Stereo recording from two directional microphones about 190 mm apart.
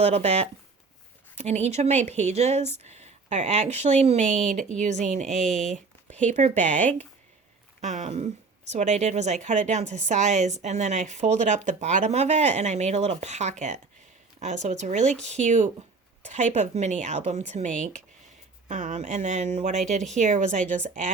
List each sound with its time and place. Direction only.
0.0 s a woman's voice: 35° right (ahead or behind)
5.3 s speech: centre (ahead or behind)
5.7 s a woman's voice: 40° right (ahead or behind)